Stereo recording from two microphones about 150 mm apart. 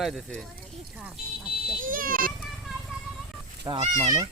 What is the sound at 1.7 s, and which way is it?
Speech, 65° right (ahead or behind).